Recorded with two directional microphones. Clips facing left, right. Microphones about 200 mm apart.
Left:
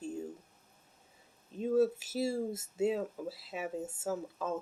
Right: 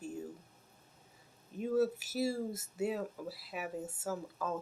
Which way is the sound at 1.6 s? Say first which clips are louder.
Left 3 dB; 25° left (ahead or behind).